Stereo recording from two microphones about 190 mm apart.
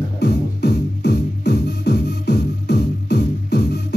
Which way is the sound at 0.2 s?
60° left (ahead or behind).